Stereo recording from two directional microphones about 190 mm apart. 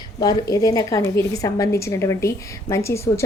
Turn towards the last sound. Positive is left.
turn(degrees=15)  # may be behind; listen again after turning